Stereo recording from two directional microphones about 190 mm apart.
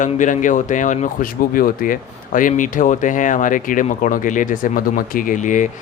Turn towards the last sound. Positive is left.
turn(degrees=40)  # may be behind; listen again after turning